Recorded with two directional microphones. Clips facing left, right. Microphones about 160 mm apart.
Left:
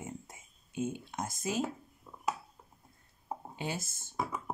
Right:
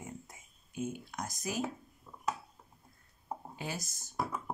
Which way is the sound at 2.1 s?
10° left (ahead or behind).